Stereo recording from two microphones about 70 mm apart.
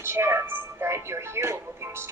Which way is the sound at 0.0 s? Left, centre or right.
Right.